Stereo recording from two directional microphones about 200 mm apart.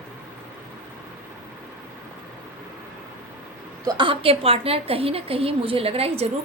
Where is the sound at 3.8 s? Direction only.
25° right (ahead or behind).